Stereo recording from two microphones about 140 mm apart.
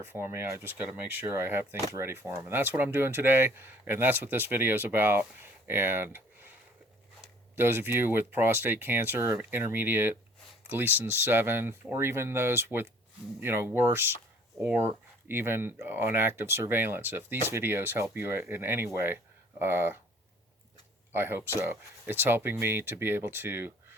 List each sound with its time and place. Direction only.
0.0 s speech: 15° right (ahead or behind)
7.5 s speech: 15° right (ahead or behind)
21.1 s speech: 15° right (ahead or behind)